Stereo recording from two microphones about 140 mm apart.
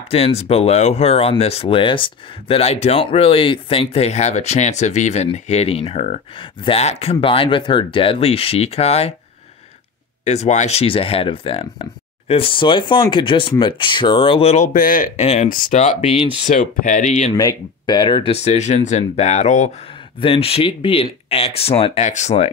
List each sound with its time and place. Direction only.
0.4 s speech: 50° left (ahead or behind)
10.2 s speech: 55° left (ahead or behind)
14.7 s speech: 75° left (ahead or behind)
15.1 s speech: 55° left (ahead or behind)
17.4 s speech: 30° left (ahead or behind); by 19.7 s 55° left (ahead or behind)
20.2 s speech: 40° left (ahead or behind)
22.0 s speech: 55° left (ahead or behind)